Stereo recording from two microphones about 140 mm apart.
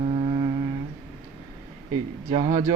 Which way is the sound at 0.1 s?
45° right (ahead or behind).